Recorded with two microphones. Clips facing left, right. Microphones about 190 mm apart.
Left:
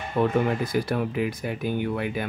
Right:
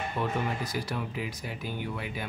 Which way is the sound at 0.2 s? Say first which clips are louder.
Left 10 dB; 55° left (ahead or behind).